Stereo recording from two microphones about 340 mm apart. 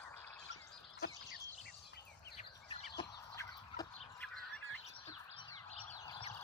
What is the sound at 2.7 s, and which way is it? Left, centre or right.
Chicken, centre.